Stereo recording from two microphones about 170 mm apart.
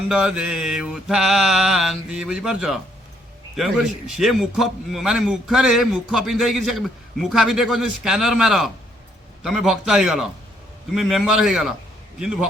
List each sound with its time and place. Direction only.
0.1 s a man's voice: 5° right (ahead or behind)